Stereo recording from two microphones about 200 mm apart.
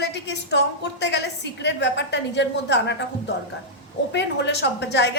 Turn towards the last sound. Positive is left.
turn(degrees=60)  # may be behind; listen again after turning